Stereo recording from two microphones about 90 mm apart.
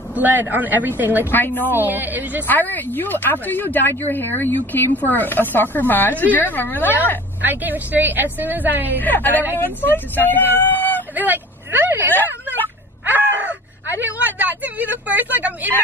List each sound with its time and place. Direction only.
0.1 s a woman's voice: 20° right (ahead or behind)
1.2 s speech: 20° left (ahead or behind)
1.7 s a woman's voice: 20° right (ahead or behind)
2.4 s speech: 20° left (ahead or behind)
7.4 s a woman's voice: 20° right (ahead or behind)
9.0 s speech: 20° left (ahead or behind)
11.1 s speech: 20° right (ahead or behind)
13.4 s speech: 15° right (ahead or behind)